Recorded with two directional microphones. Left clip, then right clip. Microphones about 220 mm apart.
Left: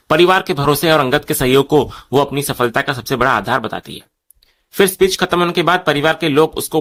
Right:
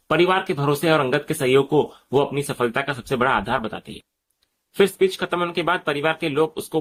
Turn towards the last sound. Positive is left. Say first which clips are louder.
# left 8 dB
turn(degrees=55)  # may be behind; listen again after turning